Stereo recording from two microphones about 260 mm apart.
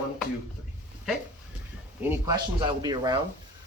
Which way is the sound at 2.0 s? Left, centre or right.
Centre.